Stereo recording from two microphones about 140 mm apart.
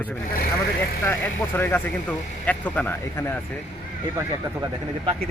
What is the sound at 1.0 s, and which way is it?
Speech, 15° left (ahead or behind).